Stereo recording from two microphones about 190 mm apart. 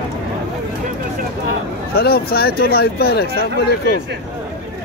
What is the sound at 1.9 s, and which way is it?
Speech, 55° left (ahead or behind).